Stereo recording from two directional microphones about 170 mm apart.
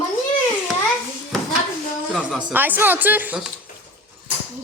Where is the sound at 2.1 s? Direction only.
5° right (ahead or behind).